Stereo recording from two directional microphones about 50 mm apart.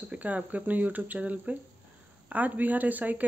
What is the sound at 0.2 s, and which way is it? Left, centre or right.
Speech, right.